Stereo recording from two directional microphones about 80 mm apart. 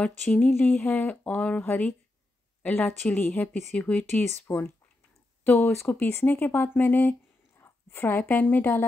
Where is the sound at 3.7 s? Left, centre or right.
Centre.